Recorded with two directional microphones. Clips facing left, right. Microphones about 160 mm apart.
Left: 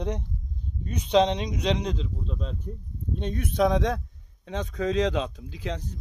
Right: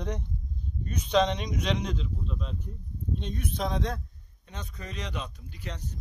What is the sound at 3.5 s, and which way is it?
A man's voice, 75° left (ahead or behind).